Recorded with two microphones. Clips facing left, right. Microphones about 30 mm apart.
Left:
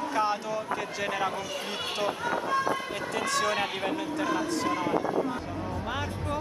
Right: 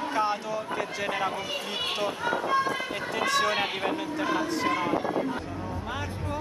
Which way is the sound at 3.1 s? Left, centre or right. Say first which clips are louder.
Right 2 dB; centre.